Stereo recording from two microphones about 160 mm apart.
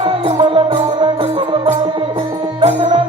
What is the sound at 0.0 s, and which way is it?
Music, 30° right (ahead or behind).